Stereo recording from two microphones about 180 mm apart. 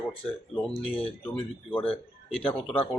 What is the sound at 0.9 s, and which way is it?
Speech, 30° left (ahead or behind).